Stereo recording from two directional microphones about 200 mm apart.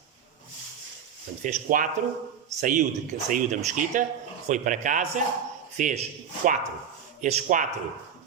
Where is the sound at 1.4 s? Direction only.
40° right (ahead or behind).